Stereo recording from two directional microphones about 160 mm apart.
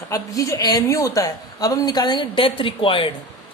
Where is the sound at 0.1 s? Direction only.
20° left (ahead or behind).